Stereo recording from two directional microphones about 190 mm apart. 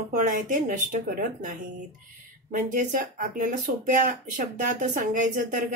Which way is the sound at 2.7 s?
45° right (ahead or behind).